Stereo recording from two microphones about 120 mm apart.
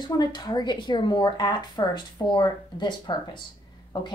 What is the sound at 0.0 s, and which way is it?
Speech, 35° left (ahead or behind).